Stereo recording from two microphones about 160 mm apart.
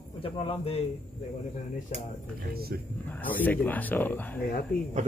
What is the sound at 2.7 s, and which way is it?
Speech, 70° right (ahead or behind).